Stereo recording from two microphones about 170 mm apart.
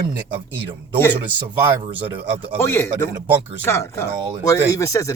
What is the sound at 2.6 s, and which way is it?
Speech, 15° left (ahead or behind).